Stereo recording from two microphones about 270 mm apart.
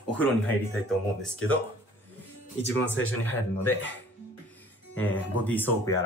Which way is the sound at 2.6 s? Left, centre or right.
Left.